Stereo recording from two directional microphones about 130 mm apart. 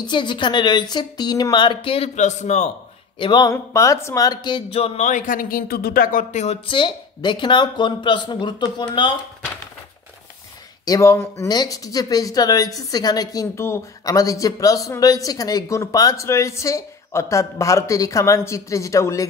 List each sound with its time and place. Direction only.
0.0 s speech: 35° left (ahead or behind)
2.1 s a man's voice: 65° left (ahead or behind)
3.2 s speech: 35° left (ahead or behind)
3.5 s a man's voice: 25° left (ahead or behind); by 6.6 s 60° left (ahead or behind)
6.6 s speech: 40° left (ahead or behind)
10.9 s speech: 25° left (ahead or behind)